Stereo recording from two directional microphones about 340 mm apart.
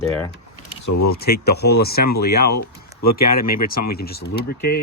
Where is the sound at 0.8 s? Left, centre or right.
Left.